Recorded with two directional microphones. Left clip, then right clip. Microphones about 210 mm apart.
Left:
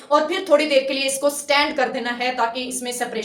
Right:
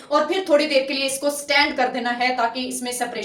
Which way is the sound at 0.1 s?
15° left (ahead or behind).